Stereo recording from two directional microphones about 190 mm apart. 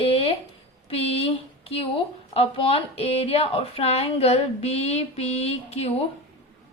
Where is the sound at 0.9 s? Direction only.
30° left (ahead or behind).